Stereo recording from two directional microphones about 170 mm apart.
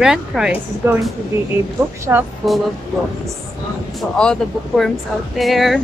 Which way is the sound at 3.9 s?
5° left (ahead or behind).